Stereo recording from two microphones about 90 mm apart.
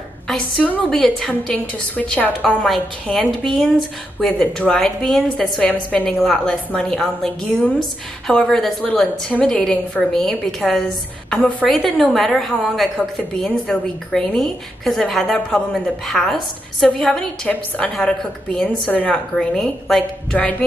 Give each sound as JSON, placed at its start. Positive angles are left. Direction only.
{"t": 0.6, "sound": "a woman's voice", "side_deg": 10}
{"t": 1.5, "sound": "a woman's voice", "side_deg": 15}
{"t": 19.3, "sound": "a woman's voice", "side_deg": 5}